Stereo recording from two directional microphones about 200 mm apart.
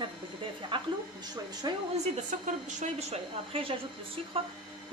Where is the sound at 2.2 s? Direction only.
35° right (ahead or behind).